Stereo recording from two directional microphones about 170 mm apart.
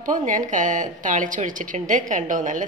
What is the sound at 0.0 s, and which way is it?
A woman's voice, 50° right (ahead or behind).